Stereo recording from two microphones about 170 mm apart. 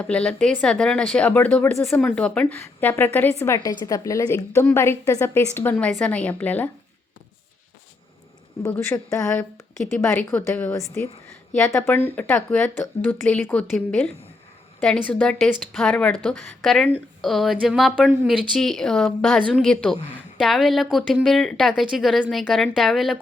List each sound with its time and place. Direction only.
0.0 s a woman's voice: 5° left (ahead or behind)
8.6 s a woman's voice: 15° left (ahead or behind)